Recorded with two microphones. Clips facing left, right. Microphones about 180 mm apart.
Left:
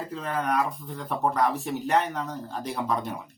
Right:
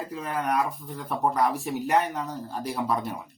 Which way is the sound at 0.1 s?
10° right (ahead or behind).